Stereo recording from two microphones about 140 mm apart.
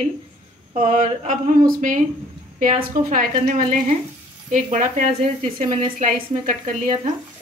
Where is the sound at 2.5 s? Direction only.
90° right.